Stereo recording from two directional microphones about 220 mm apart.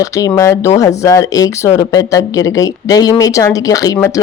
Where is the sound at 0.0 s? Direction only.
15° left (ahead or behind).